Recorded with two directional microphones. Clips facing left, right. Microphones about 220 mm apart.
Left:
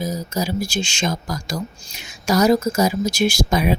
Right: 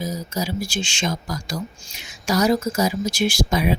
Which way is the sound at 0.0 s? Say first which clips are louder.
Left 3 dB; 45° left (ahead or behind).